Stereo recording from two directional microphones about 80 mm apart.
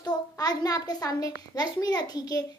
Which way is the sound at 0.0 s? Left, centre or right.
Left.